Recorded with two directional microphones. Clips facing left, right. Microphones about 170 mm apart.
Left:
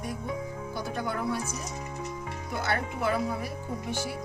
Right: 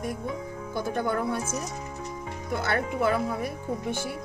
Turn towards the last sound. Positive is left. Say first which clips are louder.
# right 3 dB
turn(degrees=-50)  # may be behind; listen again after turning